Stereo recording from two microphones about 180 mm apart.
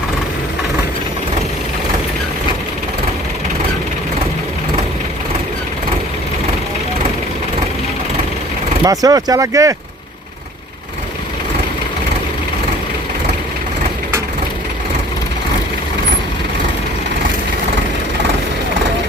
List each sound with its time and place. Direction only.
8.8 s speech: 20° right (ahead or behind)